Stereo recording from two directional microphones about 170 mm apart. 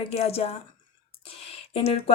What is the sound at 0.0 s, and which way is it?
Speech, 40° left (ahead or behind).